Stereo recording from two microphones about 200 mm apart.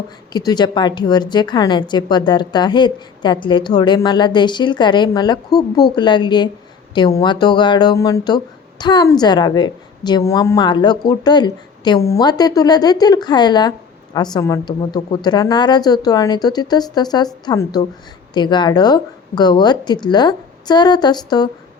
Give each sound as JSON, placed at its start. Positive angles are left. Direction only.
{"t": 0.3, "sound": "a woman's voice", "side_deg": 20}